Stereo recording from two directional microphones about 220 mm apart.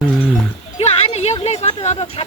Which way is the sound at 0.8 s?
30° left (ahead or behind).